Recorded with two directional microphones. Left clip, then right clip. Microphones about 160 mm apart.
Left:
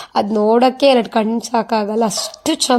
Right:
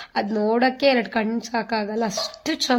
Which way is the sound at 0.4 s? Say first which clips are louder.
Left 7 dB; 35° left (ahead or behind).